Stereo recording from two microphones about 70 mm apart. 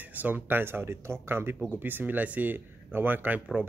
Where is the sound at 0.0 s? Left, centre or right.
Right.